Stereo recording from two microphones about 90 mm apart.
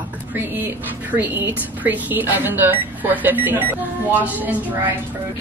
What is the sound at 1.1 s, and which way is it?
A woman's voice, 20° right (ahead or behind).